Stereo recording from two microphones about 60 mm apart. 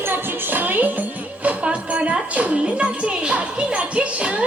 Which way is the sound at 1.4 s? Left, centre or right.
Right.